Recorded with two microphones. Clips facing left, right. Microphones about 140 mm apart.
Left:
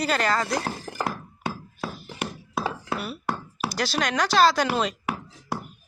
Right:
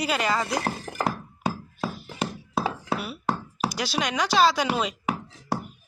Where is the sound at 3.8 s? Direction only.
5° right (ahead or behind).